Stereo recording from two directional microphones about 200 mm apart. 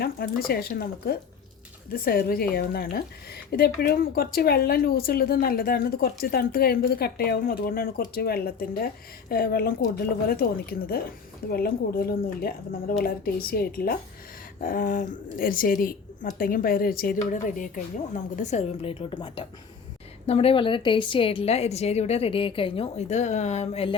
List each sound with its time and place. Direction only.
0.0 s a woman's voice: 50° left (ahead or behind); by 23.9 s 35° left (ahead or behind)